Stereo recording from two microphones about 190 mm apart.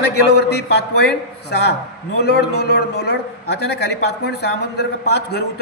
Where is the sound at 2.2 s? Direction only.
60° left (ahead or behind).